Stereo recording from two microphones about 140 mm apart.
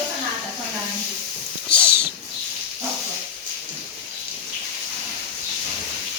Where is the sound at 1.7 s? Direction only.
15° right (ahead or behind).